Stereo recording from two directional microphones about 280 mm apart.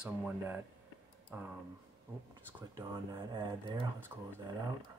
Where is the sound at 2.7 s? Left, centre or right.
Centre.